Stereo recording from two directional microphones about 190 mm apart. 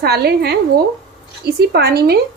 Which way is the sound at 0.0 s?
55° right (ahead or behind).